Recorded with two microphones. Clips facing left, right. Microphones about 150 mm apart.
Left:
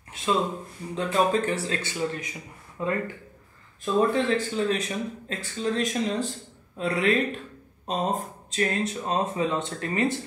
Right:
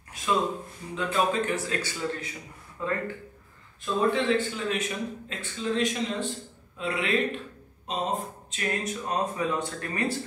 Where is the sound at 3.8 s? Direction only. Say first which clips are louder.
Left 3 dB; 40° left (ahead or behind).